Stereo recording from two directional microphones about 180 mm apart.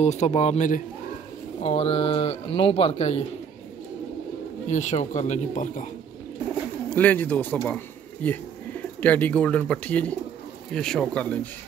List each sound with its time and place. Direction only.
0.0 s speech: 40° left (ahead or behind)
1.6 s speech: 35° left (ahead or behind)
4.6 s speech: 40° left (ahead or behind)
7.0 s speech: 10° left (ahead or behind)